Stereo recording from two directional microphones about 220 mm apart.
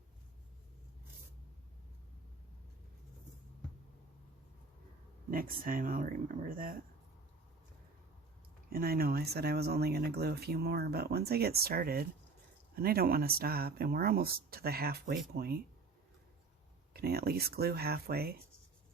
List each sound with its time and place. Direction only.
5.3 s speech: 40° right (ahead or behind)
8.7 s speech: 45° right (ahead or behind)
16.9 s speech: 45° right (ahead or behind)